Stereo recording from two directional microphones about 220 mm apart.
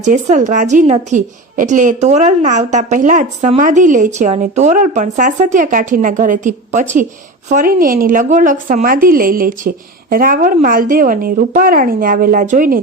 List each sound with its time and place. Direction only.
0.0 s a woman's voice: 35° right (ahead or behind)